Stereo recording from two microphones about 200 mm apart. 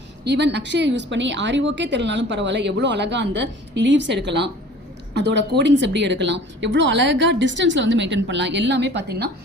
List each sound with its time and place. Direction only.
0.3 s a woman's voice: 60° right (ahead or behind)